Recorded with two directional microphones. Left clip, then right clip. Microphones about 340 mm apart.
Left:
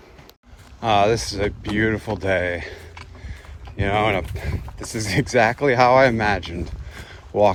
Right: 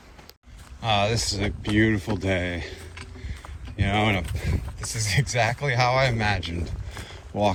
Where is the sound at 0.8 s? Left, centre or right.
Left.